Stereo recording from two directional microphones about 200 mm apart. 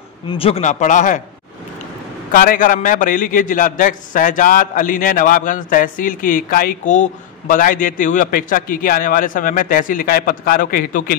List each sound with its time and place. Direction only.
0.3 s a man's voice: 30° left (ahead or behind)
2.3 s a man's voice: 45° left (ahead or behind)